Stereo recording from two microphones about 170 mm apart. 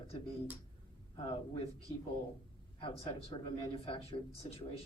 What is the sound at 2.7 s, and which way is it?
Speech, 35° left (ahead or behind).